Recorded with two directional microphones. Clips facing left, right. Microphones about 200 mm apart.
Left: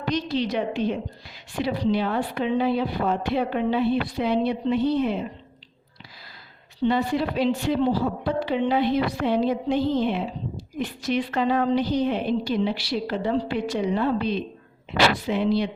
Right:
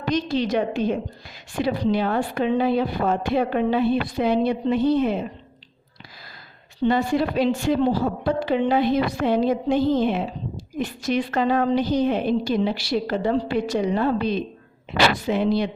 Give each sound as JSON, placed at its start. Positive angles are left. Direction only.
{"t": 0.1, "sound": "a woman's voice", "side_deg": -45}
{"t": 6.8, "sound": "a woman's voice", "side_deg": -45}